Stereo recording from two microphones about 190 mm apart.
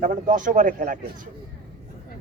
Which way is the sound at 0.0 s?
45° right (ahead or behind).